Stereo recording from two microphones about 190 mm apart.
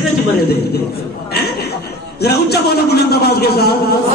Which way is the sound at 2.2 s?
55° left (ahead or behind).